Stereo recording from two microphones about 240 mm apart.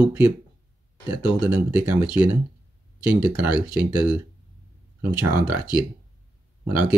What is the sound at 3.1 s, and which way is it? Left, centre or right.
Speech, centre.